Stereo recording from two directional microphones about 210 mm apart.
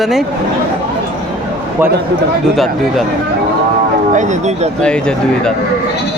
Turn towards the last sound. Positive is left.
turn(degrees=5)  # may be behind; listen again after turning